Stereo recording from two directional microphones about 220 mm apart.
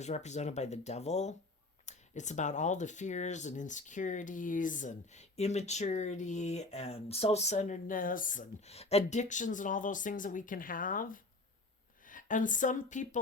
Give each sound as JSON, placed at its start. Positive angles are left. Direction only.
{"t": 0.0, "sound": "speech", "side_deg": 30}